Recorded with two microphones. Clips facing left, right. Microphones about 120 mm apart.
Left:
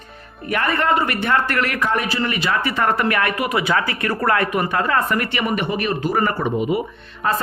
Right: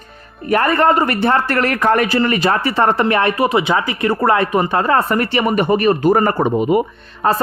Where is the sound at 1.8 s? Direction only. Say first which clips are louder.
Right 7 dB; 55° right (ahead or behind).